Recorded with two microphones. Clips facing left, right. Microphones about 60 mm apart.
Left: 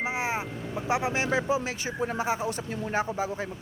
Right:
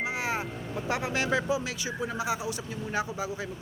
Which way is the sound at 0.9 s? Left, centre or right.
Left.